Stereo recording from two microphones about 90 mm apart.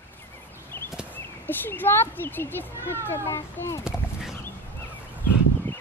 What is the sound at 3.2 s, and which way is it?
Speech, 35° left (ahead or behind).